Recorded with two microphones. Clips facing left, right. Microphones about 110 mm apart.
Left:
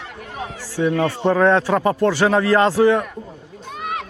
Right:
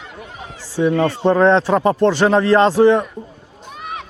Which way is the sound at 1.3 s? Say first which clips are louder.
Right 2 dB; 25° right (ahead or behind).